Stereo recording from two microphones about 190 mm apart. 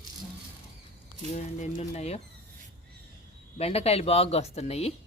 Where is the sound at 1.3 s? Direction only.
40° left (ahead or behind).